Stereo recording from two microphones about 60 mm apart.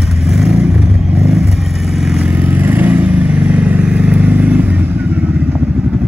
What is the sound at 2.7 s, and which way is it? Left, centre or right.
Vehicle, right.